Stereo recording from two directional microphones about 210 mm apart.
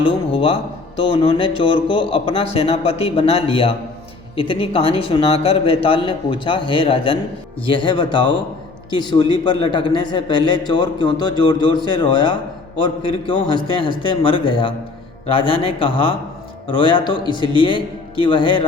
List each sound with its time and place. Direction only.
0.0 s a man's voice: 25° left (ahead or behind)